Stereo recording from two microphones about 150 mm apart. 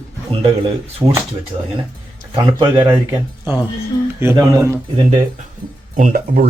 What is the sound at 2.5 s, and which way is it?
Speech, 15° right (ahead or behind).